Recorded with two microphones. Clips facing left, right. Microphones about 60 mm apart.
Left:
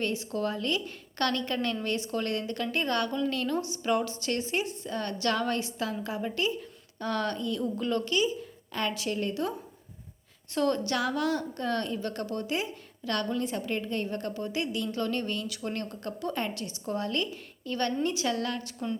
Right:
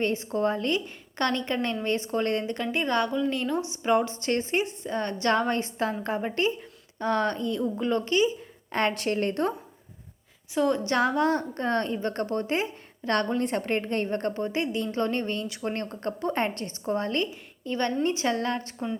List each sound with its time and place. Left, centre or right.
0.0 s a woman's voice: right
8.7 s a woman's voice: right
10.5 s a woman's voice: centre
10.8 s a woman's voice: right
13.4 s a woman's voice: right